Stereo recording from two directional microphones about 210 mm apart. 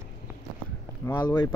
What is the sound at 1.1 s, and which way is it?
Speech, 20° left (ahead or behind).